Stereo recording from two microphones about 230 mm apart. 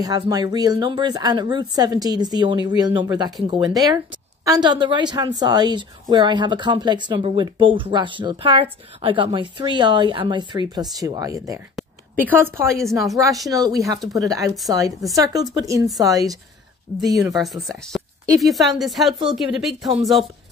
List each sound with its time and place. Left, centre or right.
0.0 s a woman's voice: centre
11.7 s a sound: centre
13.1 s speech: centre
17.3 s speech: centre